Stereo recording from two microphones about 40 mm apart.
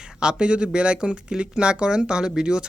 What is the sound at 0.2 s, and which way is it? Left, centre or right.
Speech, right.